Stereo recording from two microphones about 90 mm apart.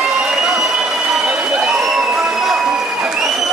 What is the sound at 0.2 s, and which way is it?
Crowd, 10° right (ahead or behind).